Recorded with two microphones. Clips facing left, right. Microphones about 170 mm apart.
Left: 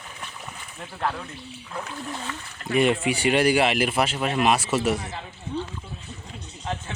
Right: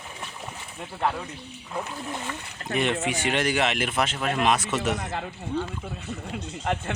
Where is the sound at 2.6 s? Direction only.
35° right (ahead or behind).